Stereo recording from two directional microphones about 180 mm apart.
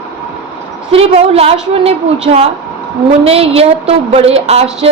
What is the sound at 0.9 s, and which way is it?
A woman's voice, 35° right (ahead or behind).